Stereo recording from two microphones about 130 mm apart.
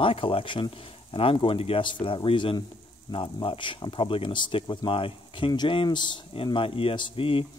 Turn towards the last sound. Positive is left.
turn(degrees=45)  # may be behind; listen again after turning